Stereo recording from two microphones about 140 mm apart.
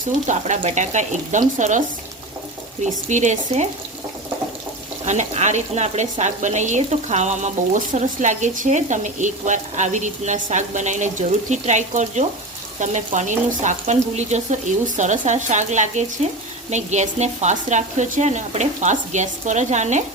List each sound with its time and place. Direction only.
0.3 s speech: 60° right (ahead or behind)
2.8 s speech: 60° right (ahead or behind)
5.0 s speech: 55° right (ahead or behind)